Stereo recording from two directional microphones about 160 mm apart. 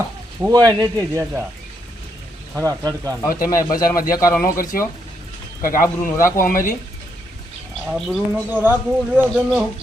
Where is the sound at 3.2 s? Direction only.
60° left (ahead or behind).